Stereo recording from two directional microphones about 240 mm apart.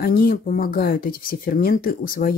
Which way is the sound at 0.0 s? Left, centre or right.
Left.